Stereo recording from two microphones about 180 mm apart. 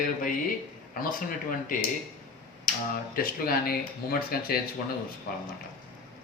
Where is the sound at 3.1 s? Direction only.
55° left (ahead or behind).